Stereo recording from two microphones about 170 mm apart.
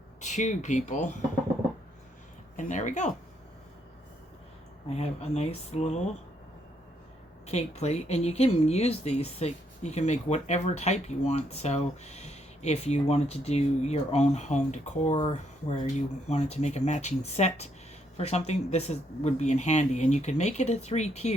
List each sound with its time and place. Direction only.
0.2 s speech: 45° left (ahead or behind)
2.6 s speech: 45° left (ahead or behind)
4.9 s speech: 40° left (ahead or behind)
7.4 s speech: 40° left (ahead or behind)